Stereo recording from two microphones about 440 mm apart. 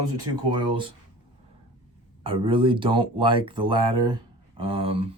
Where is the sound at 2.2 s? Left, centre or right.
Centre.